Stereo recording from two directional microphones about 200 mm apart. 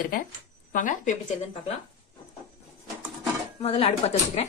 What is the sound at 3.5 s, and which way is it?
Speech, 30° left (ahead or behind).